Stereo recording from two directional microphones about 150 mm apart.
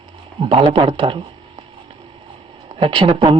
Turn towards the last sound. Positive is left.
turn(degrees=-35)  # may be behind; listen again after turning